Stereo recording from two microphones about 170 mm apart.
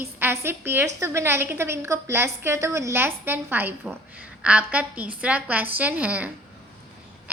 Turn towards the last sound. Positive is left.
turn(degrees=-10)  # may be behind; listen again after turning